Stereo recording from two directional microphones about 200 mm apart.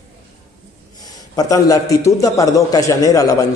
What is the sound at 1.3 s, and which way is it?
A man's voice, 15° left (ahead or behind).